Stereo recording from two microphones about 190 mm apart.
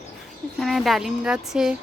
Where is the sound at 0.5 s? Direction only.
Centre (ahead or behind).